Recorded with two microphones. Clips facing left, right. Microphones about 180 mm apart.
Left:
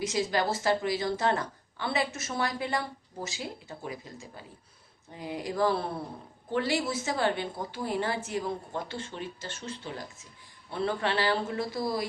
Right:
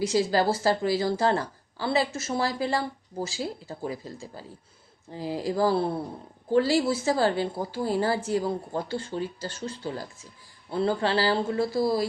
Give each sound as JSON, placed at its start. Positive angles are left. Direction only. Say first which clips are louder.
{"t": 0.0, "sound": "speech", "louder": "right 5 dB", "side_deg": -30}